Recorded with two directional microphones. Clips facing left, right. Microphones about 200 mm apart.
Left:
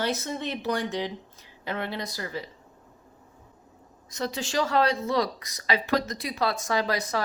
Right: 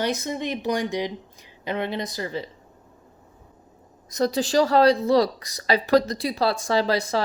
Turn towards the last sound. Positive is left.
turn(degrees=-30)  # may be behind; listen again after turning